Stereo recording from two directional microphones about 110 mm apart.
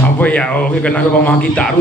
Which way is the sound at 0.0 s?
15° left (ahead or behind).